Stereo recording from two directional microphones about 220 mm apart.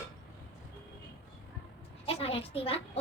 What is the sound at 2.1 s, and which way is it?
Speech, 25° left (ahead or behind).